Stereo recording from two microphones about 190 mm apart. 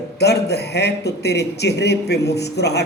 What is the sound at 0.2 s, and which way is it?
A man's voice, 60° left (ahead or behind).